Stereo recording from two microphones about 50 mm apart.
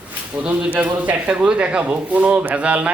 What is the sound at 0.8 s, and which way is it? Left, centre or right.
Speech, right.